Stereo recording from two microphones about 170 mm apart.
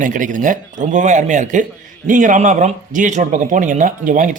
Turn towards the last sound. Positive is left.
turn(degrees=-50)  # may be behind; listen again after turning